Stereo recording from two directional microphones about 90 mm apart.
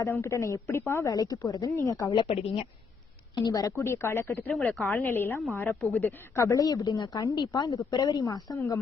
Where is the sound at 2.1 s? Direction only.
90° left.